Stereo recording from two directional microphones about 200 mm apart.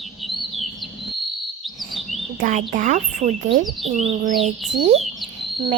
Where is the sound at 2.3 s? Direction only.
40° right (ahead or behind).